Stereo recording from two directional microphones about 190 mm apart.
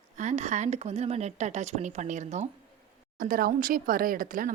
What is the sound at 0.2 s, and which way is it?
A woman's voice, 35° right (ahead or behind).